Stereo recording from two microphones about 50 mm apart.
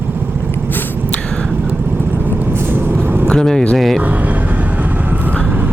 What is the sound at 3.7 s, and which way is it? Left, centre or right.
Vehicle, centre.